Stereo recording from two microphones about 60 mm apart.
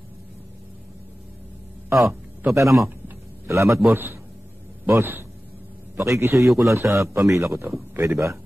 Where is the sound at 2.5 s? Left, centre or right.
Right.